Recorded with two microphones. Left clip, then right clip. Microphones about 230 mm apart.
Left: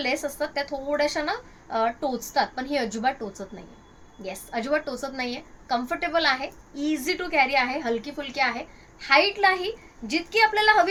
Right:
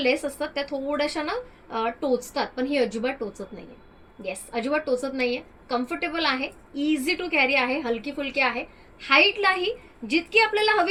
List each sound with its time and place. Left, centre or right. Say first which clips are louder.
0.0 s a woman's voice: right 2 dB; left